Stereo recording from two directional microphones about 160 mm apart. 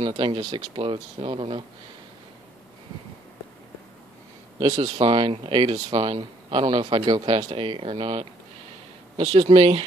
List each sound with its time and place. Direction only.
0.0 s speech: 30° right (ahead or behind)
4.6 s speech: 25° right (ahead or behind)